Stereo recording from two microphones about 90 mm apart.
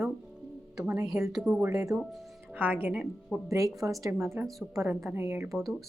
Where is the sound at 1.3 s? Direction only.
10° right (ahead or behind).